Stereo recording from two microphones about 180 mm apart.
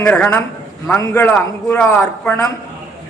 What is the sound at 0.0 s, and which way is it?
A man's voice, 10° left (ahead or behind).